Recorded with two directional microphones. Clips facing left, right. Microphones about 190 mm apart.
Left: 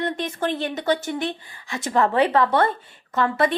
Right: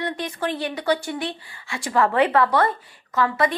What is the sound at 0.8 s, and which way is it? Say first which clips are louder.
A woman's voice: even; 20° left (ahead or behind).